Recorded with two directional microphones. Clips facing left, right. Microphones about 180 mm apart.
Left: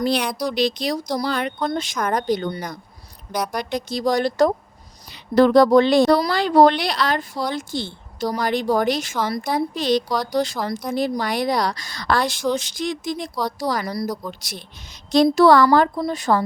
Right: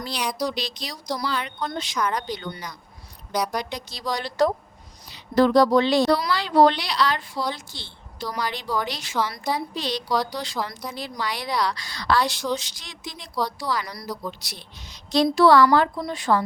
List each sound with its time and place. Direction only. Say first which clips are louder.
0.0 s speech: left 6 dB; 55° left (ahead or behind)
3.5 s speech: left 5 dB; 50° left (ahead or behind)